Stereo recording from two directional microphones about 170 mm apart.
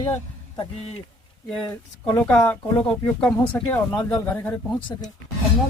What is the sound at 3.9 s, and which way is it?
Speech, 25° left (ahead or behind).